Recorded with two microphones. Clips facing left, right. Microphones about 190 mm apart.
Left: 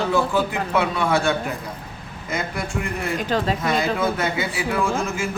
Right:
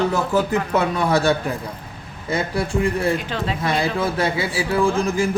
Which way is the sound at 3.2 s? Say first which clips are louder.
Left 4 dB; 40° left (ahead or behind).